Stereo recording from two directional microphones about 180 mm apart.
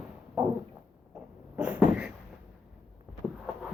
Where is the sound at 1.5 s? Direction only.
5° right (ahead or behind).